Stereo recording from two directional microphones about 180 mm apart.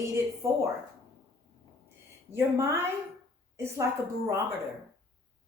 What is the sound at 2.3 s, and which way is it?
Speech, 15° right (ahead or behind).